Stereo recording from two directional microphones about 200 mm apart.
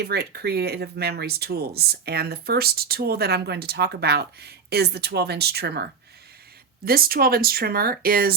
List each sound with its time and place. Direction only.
0.0 s speech: 55° right (ahead or behind)